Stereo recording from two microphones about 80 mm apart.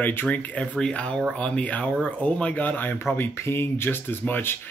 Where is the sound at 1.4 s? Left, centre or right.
Centre.